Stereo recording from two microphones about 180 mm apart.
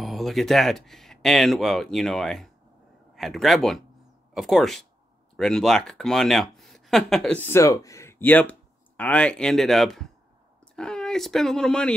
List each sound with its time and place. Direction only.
0.0 s speech: centre (ahead or behind)